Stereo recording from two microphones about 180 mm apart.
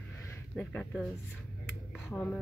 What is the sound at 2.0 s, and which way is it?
Speech, 10° left (ahead or behind).